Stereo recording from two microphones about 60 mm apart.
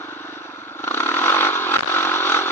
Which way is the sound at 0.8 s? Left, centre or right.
Left.